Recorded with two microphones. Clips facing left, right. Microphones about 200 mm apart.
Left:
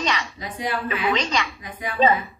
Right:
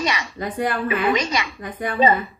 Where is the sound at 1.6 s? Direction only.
55° right (ahead or behind).